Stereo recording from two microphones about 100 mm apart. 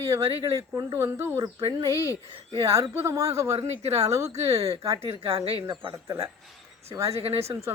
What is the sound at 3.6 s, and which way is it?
Speech, 90° right.